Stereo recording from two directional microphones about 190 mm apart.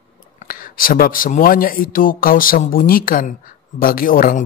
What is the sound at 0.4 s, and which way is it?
Speech, 50° left (ahead or behind).